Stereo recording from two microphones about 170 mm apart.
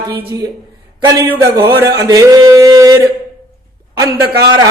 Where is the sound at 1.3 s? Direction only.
15° right (ahead or behind).